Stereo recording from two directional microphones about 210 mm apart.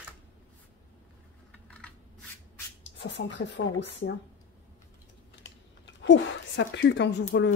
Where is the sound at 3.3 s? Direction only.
60° left (ahead or behind).